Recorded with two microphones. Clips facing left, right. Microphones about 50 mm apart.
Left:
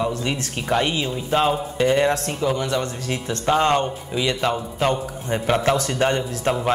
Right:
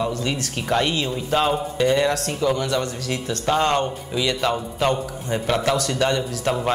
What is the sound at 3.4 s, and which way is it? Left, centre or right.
Speech, centre.